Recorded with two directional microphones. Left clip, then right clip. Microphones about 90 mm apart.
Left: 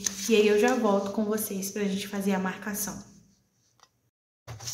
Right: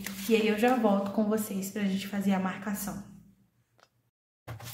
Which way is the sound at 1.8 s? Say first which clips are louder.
Left 1 dB; 15° left (ahead or behind).